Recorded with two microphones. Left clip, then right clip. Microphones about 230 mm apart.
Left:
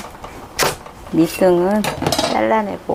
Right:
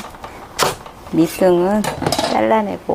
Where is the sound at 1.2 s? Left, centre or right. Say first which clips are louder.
Even; right.